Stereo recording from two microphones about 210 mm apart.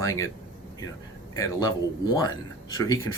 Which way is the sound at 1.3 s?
15° left (ahead or behind).